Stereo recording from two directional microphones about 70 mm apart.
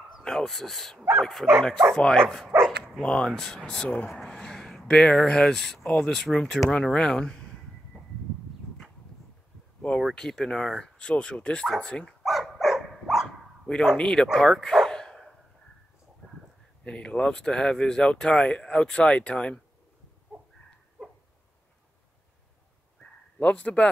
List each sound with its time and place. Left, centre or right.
0.2 s speech: centre
2.5 s dog: right
3.0 s speech: centre
9.8 s a sound: centre
10.1 s speech: centre
12.2 s dog: centre
13.9 s speech: centre
14.3 s bow-wow: centre
16.8 s speech: centre
23.4 s speech: centre